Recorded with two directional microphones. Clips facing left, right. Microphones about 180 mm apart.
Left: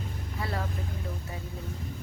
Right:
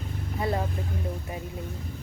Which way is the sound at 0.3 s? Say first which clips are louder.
Right 6 dB; 20° right (ahead or behind).